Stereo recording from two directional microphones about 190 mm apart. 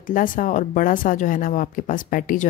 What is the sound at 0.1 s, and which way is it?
Speech, 45° left (ahead or behind).